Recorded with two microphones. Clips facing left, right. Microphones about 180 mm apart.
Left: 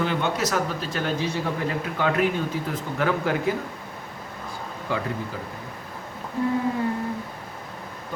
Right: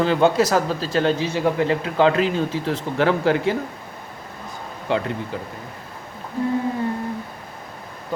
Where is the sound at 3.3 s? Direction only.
90° right.